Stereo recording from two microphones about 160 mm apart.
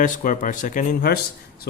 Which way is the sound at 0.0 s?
55° left (ahead or behind).